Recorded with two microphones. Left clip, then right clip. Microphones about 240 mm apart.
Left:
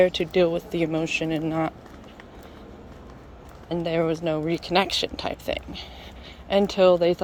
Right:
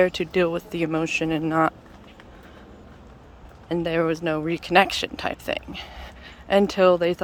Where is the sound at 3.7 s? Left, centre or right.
Centre.